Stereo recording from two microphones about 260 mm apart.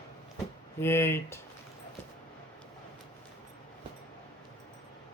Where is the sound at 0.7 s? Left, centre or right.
Centre.